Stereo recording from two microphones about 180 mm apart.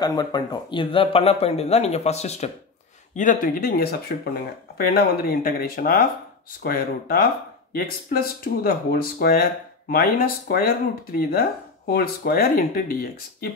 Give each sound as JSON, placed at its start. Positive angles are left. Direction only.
{"t": 0.0, "sound": "a man's voice", "side_deg": 20}
{"t": 3.2, "sound": "speech", "side_deg": 50}